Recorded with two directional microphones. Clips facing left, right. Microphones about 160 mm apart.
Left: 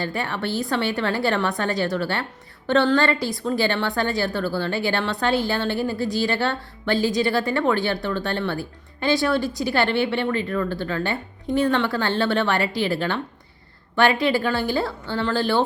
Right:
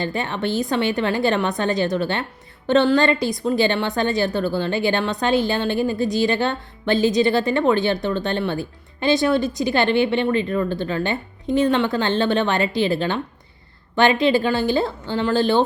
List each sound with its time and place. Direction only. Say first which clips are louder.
0.0 s a woman's voice: right 3 dB; 20° right (ahead or behind)